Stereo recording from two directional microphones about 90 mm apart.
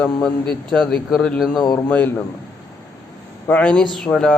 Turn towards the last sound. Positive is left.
turn(degrees=10)  # may be behind; listen again after turning